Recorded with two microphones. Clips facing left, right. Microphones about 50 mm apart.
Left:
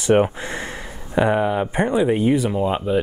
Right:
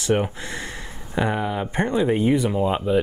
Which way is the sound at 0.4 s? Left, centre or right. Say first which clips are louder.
Left 3 dB; centre.